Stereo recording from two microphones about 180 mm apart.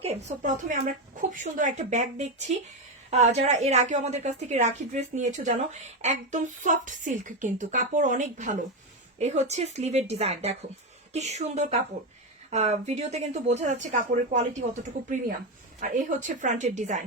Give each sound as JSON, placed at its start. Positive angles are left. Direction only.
{"t": 0.3, "sound": "a woman's voice", "side_deg": -45}